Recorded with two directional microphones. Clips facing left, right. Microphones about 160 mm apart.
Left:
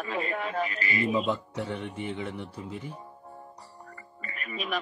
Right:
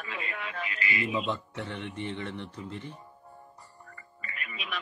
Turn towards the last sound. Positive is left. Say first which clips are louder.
# left 6 dB
turn(degrees=40)  # may be behind; listen again after turning